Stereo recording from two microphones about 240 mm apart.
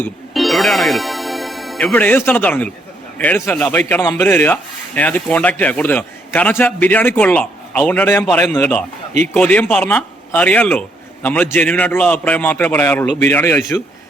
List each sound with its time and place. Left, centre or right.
0.0 s a man's voice: centre
13.1 s a man's voice: right
13.3 s a man's voice: centre